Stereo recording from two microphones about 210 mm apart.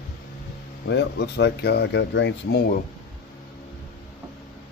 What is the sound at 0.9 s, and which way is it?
Speech, 55° left (ahead or behind).